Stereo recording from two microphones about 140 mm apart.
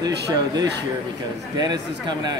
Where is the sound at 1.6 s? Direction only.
30° right (ahead or behind).